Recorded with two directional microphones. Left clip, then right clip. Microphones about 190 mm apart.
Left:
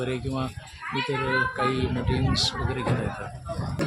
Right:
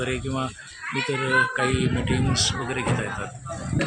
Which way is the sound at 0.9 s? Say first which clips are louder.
Right 2 dB; 40° right (ahead or behind).